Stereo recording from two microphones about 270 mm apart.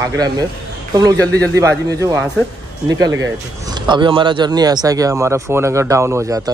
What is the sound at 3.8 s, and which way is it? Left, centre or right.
Speech, centre.